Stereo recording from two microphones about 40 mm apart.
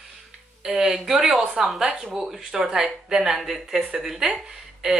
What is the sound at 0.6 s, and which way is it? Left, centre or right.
Speech, centre.